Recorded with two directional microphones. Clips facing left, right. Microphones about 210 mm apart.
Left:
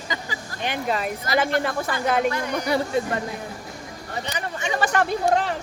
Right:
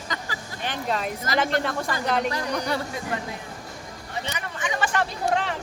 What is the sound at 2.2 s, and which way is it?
Speech, 35° right (ahead or behind).